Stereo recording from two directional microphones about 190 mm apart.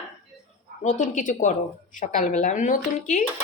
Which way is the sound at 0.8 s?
40° left (ahead or behind).